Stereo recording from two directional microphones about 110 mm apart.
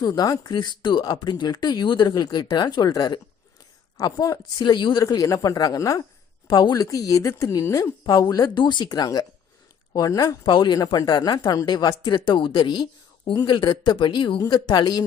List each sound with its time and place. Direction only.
0.0 s speech: 35° left (ahead or behind)
5.0 s speech: 30° left (ahead or behind)
6.7 s speech: 30° left (ahead or behind)
10.4 s speech: 40° left (ahead or behind)